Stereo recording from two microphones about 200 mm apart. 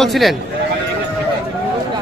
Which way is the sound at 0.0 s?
Centre (ahead or behind).